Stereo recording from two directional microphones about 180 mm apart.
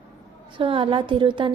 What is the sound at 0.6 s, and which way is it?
Speech, 30° right (ahead or behind).